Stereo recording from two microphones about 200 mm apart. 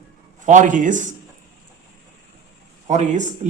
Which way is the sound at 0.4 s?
40° right (ahead or behind).